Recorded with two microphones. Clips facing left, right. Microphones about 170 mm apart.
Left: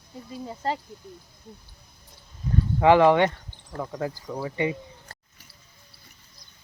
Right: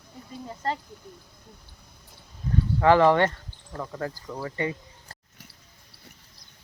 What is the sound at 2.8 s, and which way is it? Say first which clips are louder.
Speech: left 2 dB; 10° left (ahead or behind).